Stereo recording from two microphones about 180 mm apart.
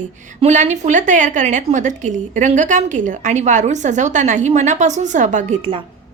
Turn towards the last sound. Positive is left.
turn(degrees=-45)  # may be behind; listen again after turning